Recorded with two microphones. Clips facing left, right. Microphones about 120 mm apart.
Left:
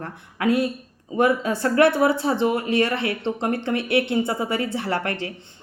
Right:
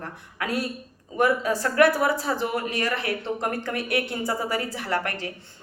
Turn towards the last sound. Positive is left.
turn(degrees=25)  # may be behind; listen again after turning